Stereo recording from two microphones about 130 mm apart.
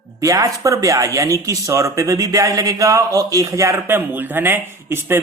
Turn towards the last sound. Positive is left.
turn(degrees=-20)  # may be behind; listen again after turning